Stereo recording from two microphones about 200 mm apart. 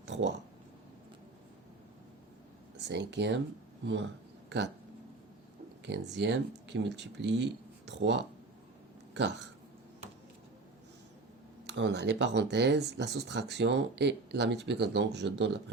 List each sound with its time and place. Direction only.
0.1 s a sound: 65° right (ahead or behind)
2.8 s speech: 60° right (ahead or behind)
4.4 s speech: 60° right (ahead or behind)
5.8 s speech: 60° right (ahead or behind)
11.6 s speech: 60° right (ahead or behind)